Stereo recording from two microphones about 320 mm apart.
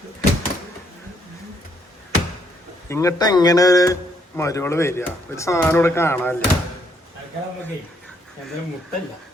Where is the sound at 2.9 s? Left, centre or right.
Centre.